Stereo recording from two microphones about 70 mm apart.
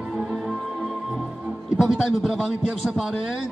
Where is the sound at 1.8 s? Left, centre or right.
Centre.